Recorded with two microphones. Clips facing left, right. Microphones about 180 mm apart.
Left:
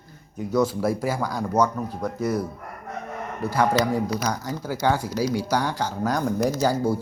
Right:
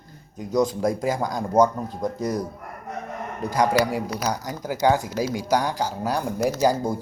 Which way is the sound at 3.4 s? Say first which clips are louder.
Right 1 dB; 20° right (ahead or behind).